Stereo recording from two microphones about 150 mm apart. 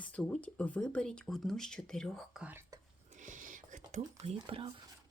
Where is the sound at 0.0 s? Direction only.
10° left (ahead or behind).